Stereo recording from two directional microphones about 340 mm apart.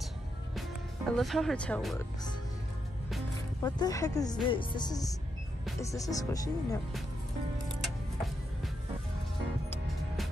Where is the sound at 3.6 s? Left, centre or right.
Centre.